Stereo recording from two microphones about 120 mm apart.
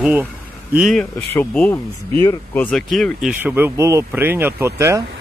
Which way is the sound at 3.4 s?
15° right (ahead or behind).